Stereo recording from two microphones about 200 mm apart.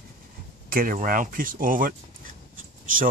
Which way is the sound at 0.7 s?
45° right (ahead or behind).